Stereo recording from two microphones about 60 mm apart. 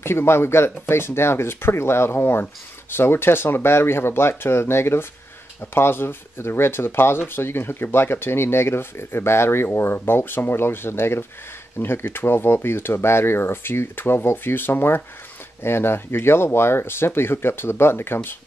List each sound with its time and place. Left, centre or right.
0.0 s speech: left